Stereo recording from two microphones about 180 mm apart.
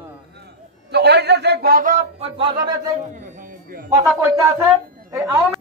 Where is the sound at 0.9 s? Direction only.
65° right (ahead or behind); by 2.3 s 45° right (ahead or behind).